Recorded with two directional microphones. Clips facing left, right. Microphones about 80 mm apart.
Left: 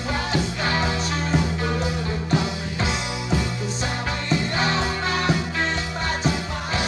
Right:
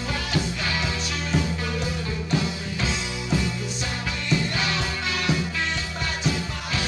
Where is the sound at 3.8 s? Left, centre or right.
Left.